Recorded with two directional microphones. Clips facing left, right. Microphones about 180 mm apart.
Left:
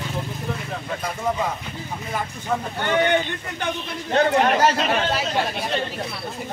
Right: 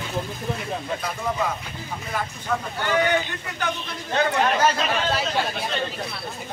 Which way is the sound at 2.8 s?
25° left (ahead or behind).